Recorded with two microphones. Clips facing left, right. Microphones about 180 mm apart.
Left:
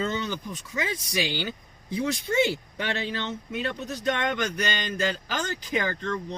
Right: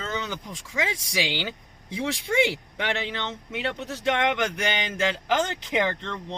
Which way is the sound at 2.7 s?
85° right.